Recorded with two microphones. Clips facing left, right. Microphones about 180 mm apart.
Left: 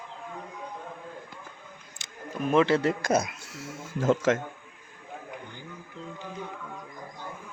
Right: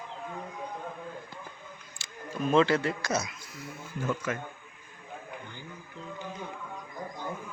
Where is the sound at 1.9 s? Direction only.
15° left (ahead or behind).